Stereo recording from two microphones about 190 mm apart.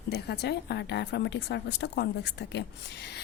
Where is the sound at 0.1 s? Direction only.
60° left (ahead or behind).